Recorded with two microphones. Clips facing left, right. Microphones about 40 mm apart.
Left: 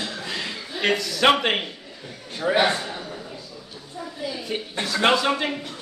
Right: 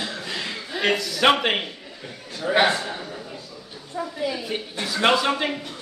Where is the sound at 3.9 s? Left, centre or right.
Right.